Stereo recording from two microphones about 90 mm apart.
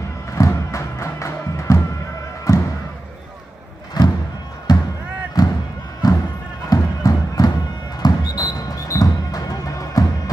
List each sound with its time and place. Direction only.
0.3 s music: 35° left (ahead or behind)
4.0 s thump: 50° left (ahead or behind)
4.7 s music: 50° left (ahead or behind)
5.4 s a sound: 45° left (ahead or behind)
6.0 s music: 45° left (ahead or behind)